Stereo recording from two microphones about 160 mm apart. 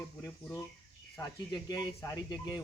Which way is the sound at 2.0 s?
20° left (ahead or behind).